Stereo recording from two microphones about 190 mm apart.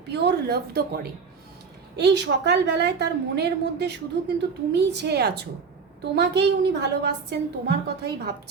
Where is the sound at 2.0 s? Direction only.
60° right (ahead or behind).